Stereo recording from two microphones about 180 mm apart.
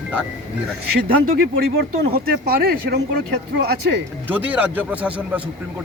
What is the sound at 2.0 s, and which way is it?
Speech, 60° right (ahead or behind).